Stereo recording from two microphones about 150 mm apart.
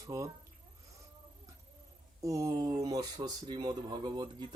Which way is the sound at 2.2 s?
20° right (ahead or behind).